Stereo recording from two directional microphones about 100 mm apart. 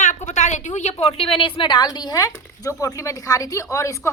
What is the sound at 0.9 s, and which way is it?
A woman's voice, 85° left.